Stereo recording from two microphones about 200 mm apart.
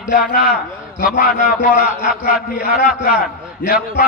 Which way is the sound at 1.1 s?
40° left (ahead or behind).